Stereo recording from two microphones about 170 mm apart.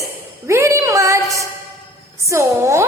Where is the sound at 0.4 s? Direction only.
15° right (ahead or behind).